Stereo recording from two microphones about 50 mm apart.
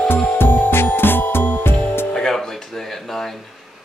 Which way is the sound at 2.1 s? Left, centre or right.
Centre.